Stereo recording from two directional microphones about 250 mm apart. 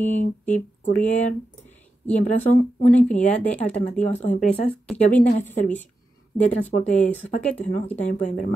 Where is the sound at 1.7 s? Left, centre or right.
Centre.